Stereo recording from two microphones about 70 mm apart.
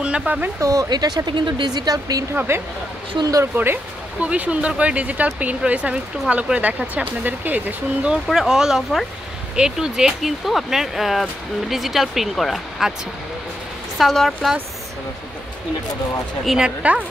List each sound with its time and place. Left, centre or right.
0.0 s speech: centre
0.6 s a woman's voice: right
3.5 s speech: right
8.3 s speech: centre
13.9 s speech: centre
16.4 s speech: centre